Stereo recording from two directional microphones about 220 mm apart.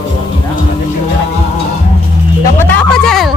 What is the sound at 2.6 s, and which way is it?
Music, 5° left (ahead or behind).